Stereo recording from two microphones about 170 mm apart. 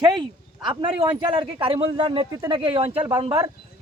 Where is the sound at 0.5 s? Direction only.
25° right (ahead or behind).